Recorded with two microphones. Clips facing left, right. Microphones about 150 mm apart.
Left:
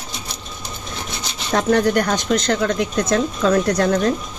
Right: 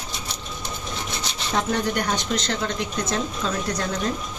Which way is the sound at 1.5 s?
70° left (ahead or behind).